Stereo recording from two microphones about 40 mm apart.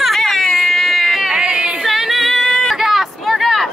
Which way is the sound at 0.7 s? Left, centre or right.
Centre.